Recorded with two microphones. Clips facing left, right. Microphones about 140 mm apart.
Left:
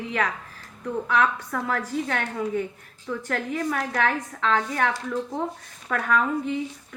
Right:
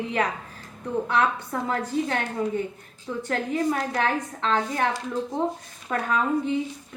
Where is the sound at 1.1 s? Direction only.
30° right (ahead or behind).